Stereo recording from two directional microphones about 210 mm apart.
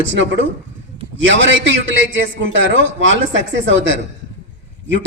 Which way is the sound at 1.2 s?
65° right (ahead or behind).